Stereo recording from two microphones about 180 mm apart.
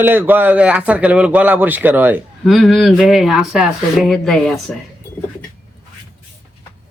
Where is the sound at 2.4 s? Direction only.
Centre (ahead or behind).